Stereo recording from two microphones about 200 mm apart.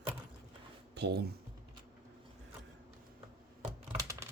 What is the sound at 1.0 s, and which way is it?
Speech, 55° right (ahead or behind).